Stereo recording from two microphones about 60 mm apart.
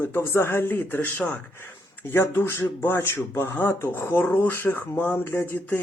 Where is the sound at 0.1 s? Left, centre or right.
Left.